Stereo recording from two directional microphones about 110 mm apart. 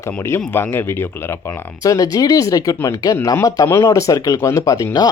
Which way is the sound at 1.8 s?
30° left (ahead or behind).